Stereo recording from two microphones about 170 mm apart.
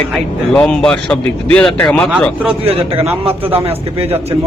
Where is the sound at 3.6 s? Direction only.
35° right (ahead or behind).